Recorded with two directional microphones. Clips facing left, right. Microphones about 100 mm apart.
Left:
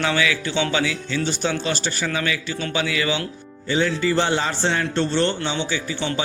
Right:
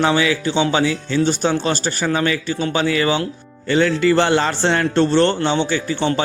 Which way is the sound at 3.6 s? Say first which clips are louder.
Right 5 dB; 70° right (ahead or behind).